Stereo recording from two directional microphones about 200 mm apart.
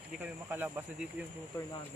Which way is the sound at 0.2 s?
10° right (ahead or behind).